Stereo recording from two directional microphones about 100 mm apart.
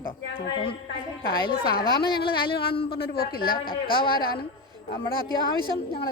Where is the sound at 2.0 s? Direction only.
55° left (ahead or behind).